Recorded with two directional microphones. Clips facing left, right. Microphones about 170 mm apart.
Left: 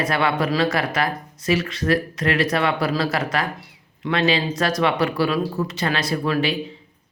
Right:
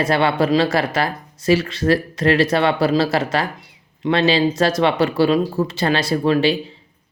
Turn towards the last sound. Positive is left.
turn(degrees=-25)  # may be behind; listen again after turning